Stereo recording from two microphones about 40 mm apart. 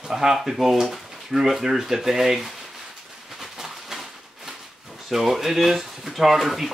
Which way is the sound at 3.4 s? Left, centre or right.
Centre.